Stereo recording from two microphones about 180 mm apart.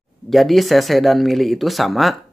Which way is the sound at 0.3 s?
Centre (ahead or behind).